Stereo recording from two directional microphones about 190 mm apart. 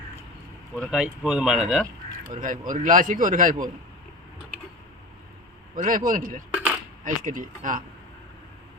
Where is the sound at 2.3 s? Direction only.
45° right (ahead or behind).